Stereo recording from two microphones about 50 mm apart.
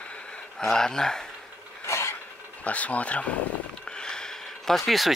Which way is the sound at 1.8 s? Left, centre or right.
Left.